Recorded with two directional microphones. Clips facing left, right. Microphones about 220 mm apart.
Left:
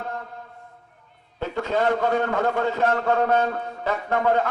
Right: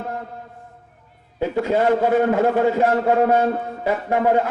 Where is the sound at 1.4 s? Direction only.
15° right (ahead or behind).